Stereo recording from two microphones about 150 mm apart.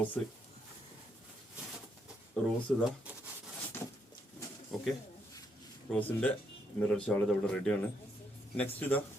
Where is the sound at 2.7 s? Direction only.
5° left (ahead or behind).